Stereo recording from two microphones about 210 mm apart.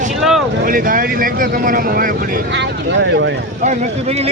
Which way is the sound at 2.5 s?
55° right (ahead or behind).